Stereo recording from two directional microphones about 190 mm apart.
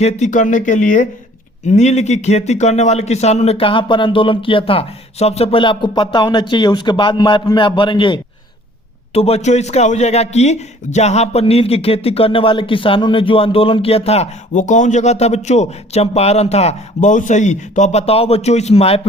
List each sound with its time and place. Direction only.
0.0 s a man's voice: 40° left (ahead or behind)